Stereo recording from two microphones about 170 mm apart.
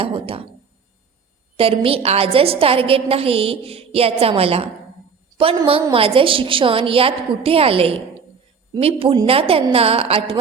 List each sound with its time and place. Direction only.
0.0 s a woman's voice: 30° right (ahead or behind)
1.5 s a woman's voice: 35° right (ahead or behind)